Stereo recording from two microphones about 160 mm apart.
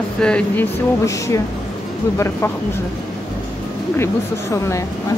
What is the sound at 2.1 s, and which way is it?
Speech, 15° left (ahead or behind).